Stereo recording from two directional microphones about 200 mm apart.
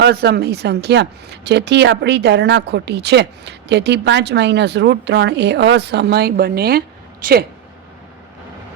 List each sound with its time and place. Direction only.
0.0 s speech: 55° right (ahead or behind)